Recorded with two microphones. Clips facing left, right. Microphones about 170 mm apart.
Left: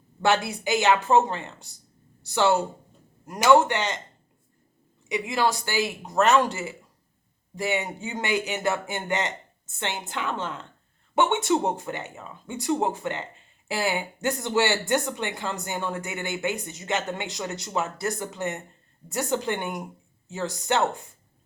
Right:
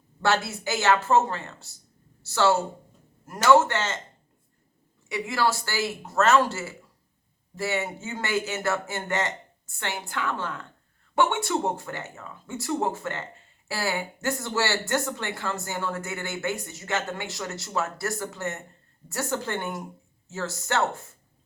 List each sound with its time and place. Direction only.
0.2 s a man's voice: 15° left (ahead or behind)
5.0 s a man's voice: 20° left (ahead or behind)